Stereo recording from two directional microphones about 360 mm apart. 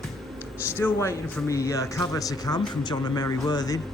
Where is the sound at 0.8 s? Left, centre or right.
Centre.